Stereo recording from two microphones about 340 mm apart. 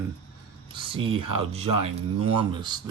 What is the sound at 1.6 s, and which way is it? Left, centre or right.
Speech, right.